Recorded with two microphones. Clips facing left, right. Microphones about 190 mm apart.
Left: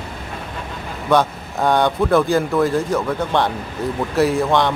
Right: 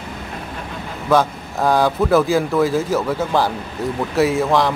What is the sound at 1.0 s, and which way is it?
Speech, centre (ahead or behind).